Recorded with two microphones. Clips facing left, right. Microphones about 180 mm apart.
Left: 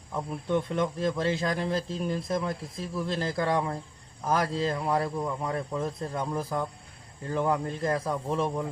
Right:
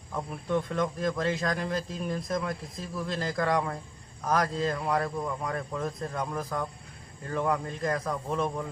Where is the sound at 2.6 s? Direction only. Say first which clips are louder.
Left 3 dB; centre (ahead or behind).